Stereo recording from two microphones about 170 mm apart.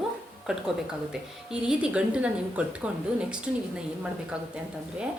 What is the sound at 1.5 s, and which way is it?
Speech, 5° right (ahead or behind).